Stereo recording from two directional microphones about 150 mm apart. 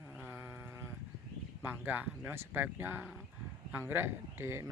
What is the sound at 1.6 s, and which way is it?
Speech, 10° right (ahead or behind).